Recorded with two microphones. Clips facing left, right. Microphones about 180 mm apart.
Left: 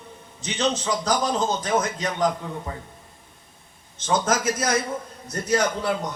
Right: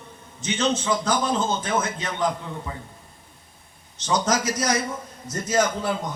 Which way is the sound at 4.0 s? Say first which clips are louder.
Even; 50° left (ahead or behind).